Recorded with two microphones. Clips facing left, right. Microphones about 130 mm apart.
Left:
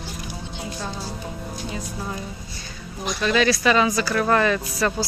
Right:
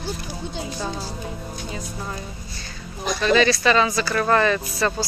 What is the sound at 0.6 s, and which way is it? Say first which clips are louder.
Speech: left 1 dB; centre (ahead or behind).